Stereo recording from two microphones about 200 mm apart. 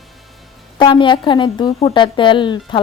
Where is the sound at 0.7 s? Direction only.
25° left (ahead or behind).